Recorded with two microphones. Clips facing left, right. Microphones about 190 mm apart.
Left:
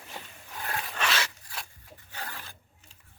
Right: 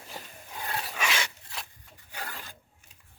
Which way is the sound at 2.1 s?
10° right (ahead or behind).